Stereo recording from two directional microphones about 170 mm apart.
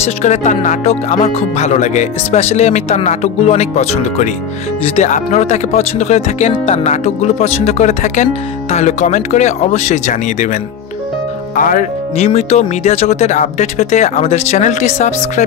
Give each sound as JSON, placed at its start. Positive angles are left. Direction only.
{"t": 0.0, "sound": "speech", "side_deg": 45}